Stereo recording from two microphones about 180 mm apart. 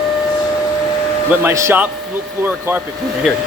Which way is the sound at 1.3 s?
10° right (ahead or behind).